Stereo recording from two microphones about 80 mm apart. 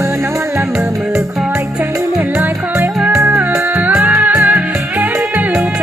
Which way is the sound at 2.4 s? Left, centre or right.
Right.